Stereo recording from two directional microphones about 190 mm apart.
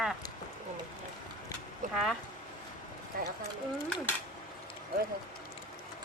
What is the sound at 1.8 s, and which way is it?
Speech, 40° right (ahead or behind).